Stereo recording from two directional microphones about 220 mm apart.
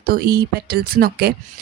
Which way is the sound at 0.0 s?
40° right (ahead or behind).